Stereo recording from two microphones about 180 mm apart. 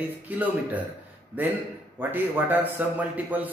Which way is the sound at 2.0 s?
10° right (ahead or behind).